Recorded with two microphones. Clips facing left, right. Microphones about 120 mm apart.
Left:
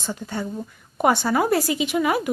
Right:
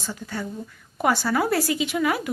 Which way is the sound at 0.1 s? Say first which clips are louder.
Left 3 dB; 25° left (ahead or behind).